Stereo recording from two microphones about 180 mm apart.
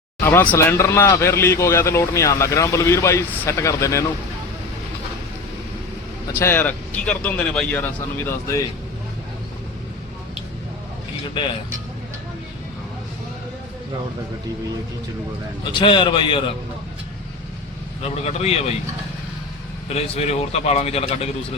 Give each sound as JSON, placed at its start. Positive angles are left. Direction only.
{"t": 0.3, "sound": "speech", "side_deg": 10}
{"t": 6.2, "sound": "speech", "side_deg": 15}
{"t": 15.7, "sound": "a man's voice", "side_deg": 25}
{"t": 18.0, "sound": "speech", "side_deg": 35}
{"t": 19.9, "sound": "speech", "side_deg": 35}